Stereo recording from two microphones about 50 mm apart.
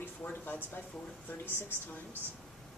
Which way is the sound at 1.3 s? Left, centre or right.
Left.